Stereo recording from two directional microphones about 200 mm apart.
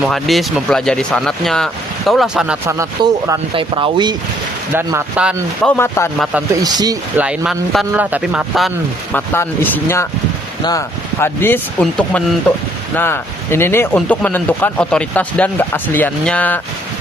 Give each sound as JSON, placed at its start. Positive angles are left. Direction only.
{"t": 0.0, "sound": "speech", "side_deg": 0}
{"t": 2.7, "sound": "speech", "side_deg": -15}
{"t": 4.7, "sound": "speech", "side_deg": -10}
{"t": 5.6, "sound": "speech", "side_deg": 10}
{"t": 6.5, "sound": "speech", "side_deg": -20}
{"t": 7.2, "sound": "speech", "side_deg": -5}
{"t": 9.1, "sound": "speech", "side_deg": 10}